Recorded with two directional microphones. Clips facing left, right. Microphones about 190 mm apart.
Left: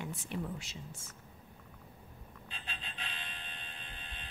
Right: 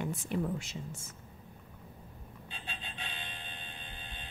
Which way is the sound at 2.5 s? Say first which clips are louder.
Right 2 dB; 30° right (ahead or behind).